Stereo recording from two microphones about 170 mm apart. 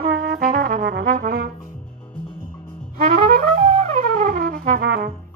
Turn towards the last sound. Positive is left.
turn(degrees=-65)  # may be behind; listen again after turning